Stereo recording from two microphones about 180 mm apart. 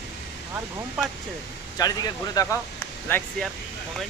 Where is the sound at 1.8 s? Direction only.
20° left (ahead or behind).